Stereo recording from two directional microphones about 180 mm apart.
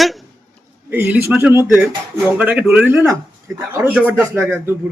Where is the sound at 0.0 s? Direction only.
Centre (ahead or behind).